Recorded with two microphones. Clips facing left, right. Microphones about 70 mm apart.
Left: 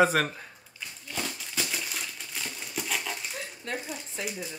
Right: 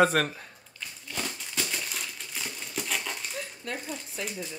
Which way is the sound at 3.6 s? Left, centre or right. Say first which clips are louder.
Left 2 dB; left.